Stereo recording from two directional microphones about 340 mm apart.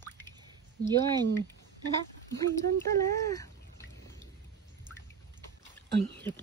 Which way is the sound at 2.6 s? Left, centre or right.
Centre.